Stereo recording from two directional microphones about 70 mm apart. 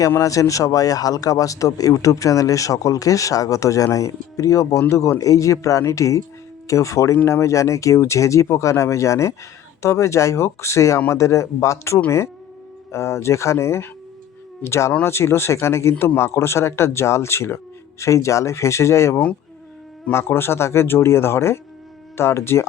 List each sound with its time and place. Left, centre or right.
0.2 s speech: left